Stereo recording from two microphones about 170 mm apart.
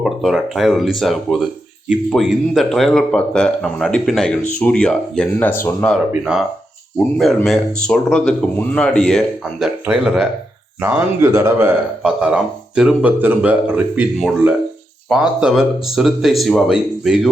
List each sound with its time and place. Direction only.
0.0 s speech: centre (ahead or behind)
7.4 s speech: centre (ahead or behind); by 11.7 s 15° right (ahead or behind)
12.0 s speech: 5° right (ahead or behind)